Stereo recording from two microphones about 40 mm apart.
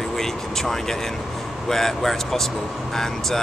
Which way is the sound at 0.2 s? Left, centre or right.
Centre.